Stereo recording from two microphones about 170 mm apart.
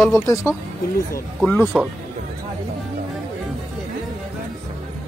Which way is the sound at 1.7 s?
5° right (ahead or behind).